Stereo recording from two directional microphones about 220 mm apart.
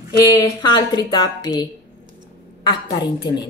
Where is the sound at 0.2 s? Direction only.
15° left (ahead or behind).